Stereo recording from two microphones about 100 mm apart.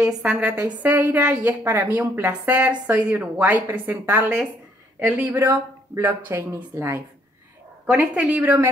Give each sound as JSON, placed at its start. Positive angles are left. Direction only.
{"t": 0.2, "sound": "a woman's voice", "side_deg": -15}
{"t": 7.8, "sound": "a woman's voice", "side_deg": -10}